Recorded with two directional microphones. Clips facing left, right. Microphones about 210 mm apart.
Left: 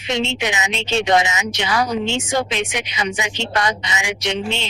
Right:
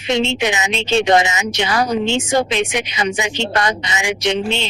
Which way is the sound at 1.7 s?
40° right (ahead or behind).